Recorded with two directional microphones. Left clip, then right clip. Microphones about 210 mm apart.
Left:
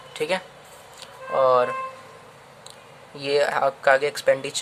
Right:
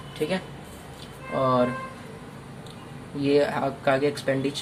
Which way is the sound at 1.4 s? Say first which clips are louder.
Left 4 dB; 50° left (ahead or behind).